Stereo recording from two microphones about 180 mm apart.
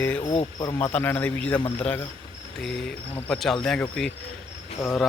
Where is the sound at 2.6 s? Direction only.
5° left (ahead or behind).